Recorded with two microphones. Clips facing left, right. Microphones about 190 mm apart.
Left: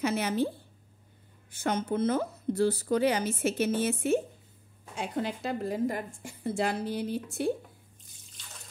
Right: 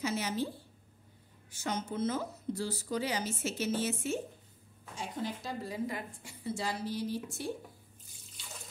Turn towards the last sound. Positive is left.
turn(degrees=60)  # may be behind; listen again after turning